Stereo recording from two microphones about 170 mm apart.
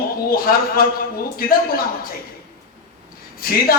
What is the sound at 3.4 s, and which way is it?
Speech, 60° left (ahead or behind).